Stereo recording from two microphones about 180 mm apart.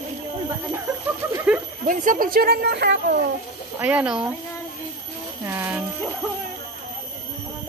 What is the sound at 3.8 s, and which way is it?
Speech, 5° right (ahead or behind).